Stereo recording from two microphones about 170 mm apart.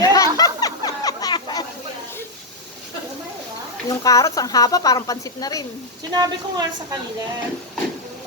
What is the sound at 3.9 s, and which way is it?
Speech, 20° left (ahead or behind).